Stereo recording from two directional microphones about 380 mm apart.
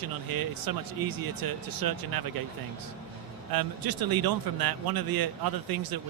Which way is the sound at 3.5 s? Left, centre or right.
Right.